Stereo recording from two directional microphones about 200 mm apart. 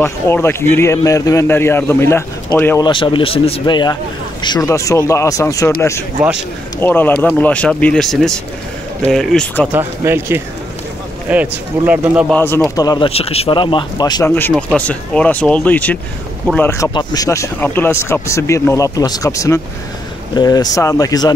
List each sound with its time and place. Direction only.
0.0 s speech: 10° left (ahead or behind)
2.8 s speech: 25° left (ahead or behind); by 9.7 s 5° left (ahead or behind)
9.7 s a man's voice: 10° right (ahead or behind)
12.3 s speech: 10° left (ahead or behind)
14.3 s speech: 5° left (ahead or behind)